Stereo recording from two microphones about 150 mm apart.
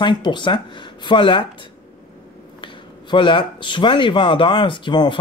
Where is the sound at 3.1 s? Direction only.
35° left (ahead or behind).